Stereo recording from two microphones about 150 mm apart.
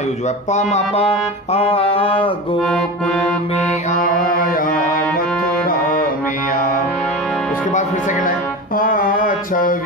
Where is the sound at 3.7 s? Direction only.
60° left (ahead or behind).